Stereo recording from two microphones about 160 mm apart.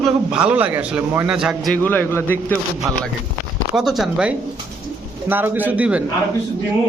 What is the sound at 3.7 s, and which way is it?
A man's voice, centre (ahead or behind).